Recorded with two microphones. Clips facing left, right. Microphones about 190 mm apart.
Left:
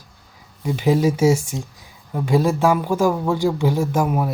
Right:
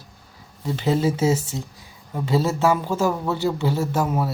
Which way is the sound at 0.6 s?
15° left (ahead or behind).